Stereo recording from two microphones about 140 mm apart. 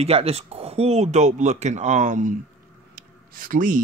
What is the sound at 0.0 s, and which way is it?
Speech, 45° right (ahead or behind).